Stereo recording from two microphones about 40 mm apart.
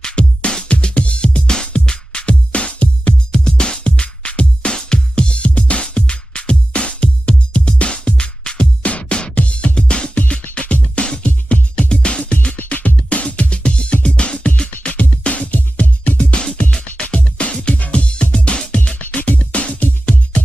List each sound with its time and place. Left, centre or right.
0.0 s music: left
3.3 s music: left
9.8 s music: left
18.9 s music: left